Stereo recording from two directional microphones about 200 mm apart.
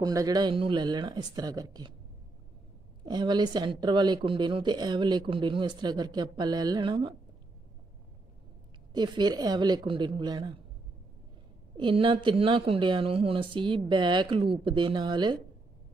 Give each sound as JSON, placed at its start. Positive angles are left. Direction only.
{"t": 0.0, "sound": "speech", "side_deg": -20}
{"t": 3.1, "sound": "speech", "side_deg": -20}
{"t": 8.9, "sound": "speech", "side_deg": -20}
{"t": 11.7, "sound": "speech", "side_deg": -25}